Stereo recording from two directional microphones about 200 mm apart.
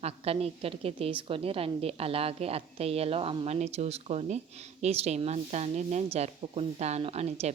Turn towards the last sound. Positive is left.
turn(degrees=-30)  # may be behind; listen again after turning